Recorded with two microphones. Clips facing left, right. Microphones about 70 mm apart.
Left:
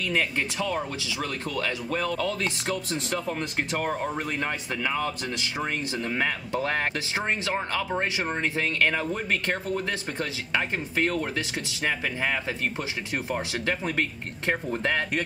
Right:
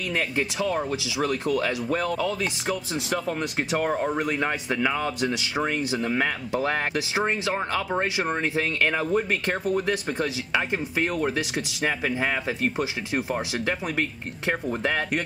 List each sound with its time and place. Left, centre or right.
0.1 s speech: centre